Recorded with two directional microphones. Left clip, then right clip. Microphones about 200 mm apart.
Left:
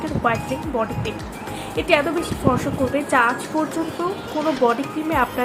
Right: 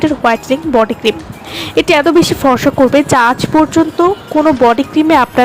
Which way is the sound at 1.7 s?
50° right (ahead or behind).